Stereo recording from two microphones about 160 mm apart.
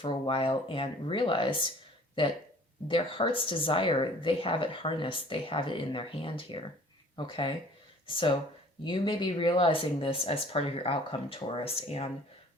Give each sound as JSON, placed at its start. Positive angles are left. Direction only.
{"t": 0.0, "sound": "speech", "side_deg": 35}
{"t": 2.8, "sound": "speech", "side_deg": 30}